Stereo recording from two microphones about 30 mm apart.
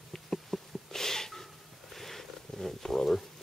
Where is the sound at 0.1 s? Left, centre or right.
Centre.